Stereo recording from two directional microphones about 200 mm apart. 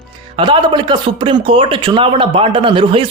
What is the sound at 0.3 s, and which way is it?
Speech, 25° right (ahead or behind).